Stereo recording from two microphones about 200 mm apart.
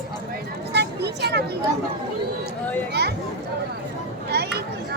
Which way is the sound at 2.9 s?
55° right (ahead or behind).